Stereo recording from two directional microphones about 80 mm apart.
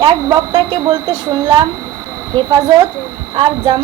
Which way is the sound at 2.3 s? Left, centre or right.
Right.